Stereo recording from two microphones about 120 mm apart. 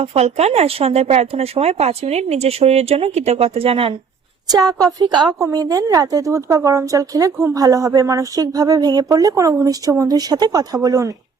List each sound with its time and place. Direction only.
0.0 s speech: 60° right (ahead or behind)
4.4 s a woman's voice: 30° right (ahead or behind)